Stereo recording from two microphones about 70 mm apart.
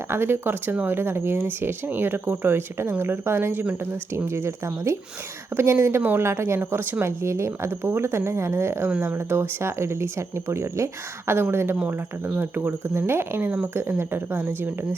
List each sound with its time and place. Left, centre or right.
0.1 s speech: right
4.3 s speech: right
6.0 s a woman's voice: right
6.2 s speech: right